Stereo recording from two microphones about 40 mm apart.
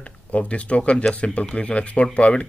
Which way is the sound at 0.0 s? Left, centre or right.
Left.